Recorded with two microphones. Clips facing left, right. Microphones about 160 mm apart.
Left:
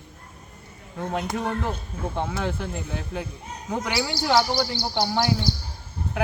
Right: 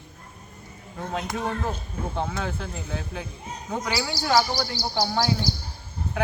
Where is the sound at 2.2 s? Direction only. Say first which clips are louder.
Left 2 dB; centre (ahead or behind).